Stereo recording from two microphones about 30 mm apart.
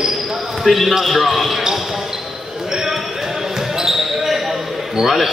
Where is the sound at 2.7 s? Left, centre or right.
Centre.